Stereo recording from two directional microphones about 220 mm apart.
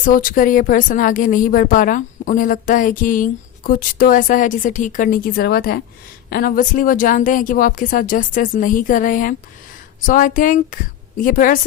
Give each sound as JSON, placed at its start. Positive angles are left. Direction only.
{"t": 0.0, "sound": "a woman's voice", "side_deg": 40}